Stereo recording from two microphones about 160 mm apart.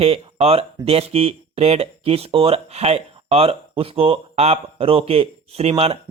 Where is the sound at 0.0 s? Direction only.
40° right (ahead or behind).